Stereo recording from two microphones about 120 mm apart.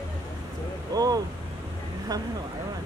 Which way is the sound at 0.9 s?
30° right (ahead or behind).